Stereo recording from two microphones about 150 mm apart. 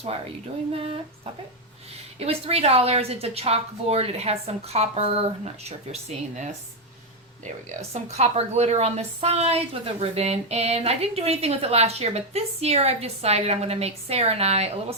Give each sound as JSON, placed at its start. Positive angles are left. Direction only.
{"t": 0.7, "sound": "a woman's voice", "side_deg": -40}
{"t": 8.1, "sound": "a woman's voice", "side_deg": -45}